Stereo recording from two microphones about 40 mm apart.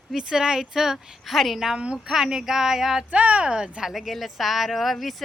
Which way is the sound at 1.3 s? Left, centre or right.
Centre.